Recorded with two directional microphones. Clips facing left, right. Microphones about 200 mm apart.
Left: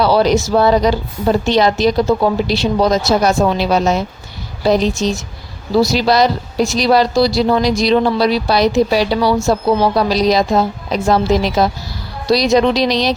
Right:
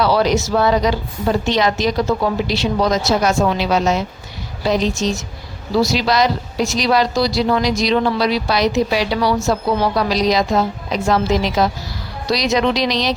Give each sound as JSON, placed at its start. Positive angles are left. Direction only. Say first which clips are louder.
{"t": 0.0, "sound": "a woman's voice", "louder": "left 3 dB", "side_deg": 30}